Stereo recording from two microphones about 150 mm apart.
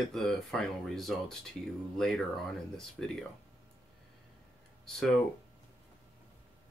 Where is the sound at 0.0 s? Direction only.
Centre (ahead or behind).